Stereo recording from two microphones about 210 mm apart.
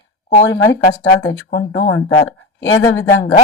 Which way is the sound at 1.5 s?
55° left (ahead or behind).